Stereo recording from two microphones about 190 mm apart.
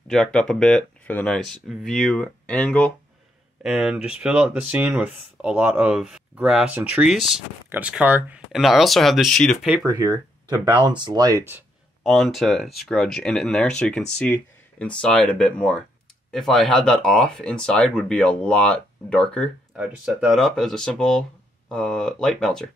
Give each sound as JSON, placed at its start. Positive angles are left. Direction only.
{"t": 0.1, "sound": "speech", "side_deg": 5}
{"t": 9.8, "sound": "speech", "side_deg": -20}
{"t": 12.0, "sound": "speech", "side_deg": 0}